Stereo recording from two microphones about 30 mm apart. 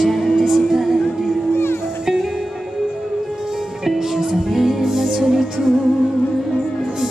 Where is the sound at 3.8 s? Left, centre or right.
Centre.